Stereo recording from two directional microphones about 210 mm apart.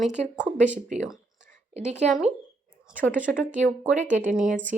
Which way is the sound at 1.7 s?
35° right (ahead or behind).